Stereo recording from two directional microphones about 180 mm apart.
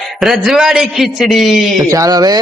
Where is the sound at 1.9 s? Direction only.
20° right (ahead or behind).